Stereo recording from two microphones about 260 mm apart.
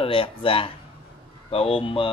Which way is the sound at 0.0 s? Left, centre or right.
Centre.